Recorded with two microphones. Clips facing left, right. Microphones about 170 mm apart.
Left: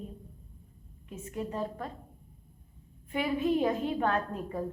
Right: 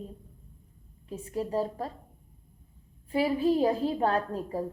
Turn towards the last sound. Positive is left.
turn(degrees=-35)  # may be behind; listen again after turning